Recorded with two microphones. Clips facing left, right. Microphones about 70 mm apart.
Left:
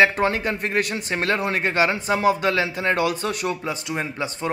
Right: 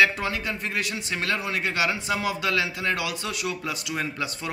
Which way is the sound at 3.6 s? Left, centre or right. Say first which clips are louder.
Left 3 dB; left.